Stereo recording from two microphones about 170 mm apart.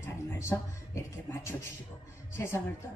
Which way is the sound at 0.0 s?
15° left (ahead or behind).